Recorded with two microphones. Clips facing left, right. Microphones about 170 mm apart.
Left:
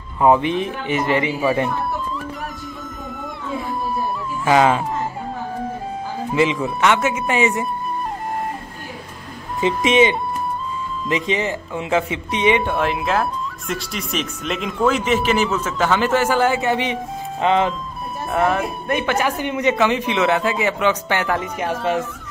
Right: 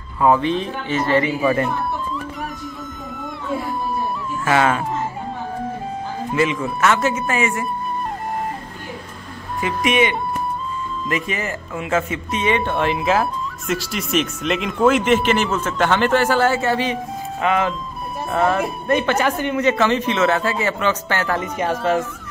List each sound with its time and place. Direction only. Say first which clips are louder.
0.2 s speech: left 1 dB; 20° left (ahead or behind)
4.5 s speech: left 3 dB; 20° left (ahead or behind)
6.3 s speech: left 1 dB; 20° left (ahead or behind)
9.6 s speech: left 3 dB; 25° left (ahead or behind)
12.7 s speech: right 1 dB; centre (ahead or behind); by 17.7 s 25° left (ahead or behind)
18.3 s speech: even; centre (ahead or behind)
18.9 s speech: right 2 dB; 10° left (ahead or behind)
21.4 s speech: right 2 dB; centre (ahead or behind)